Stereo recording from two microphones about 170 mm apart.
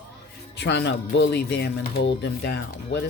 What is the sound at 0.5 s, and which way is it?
Speech, 85° left.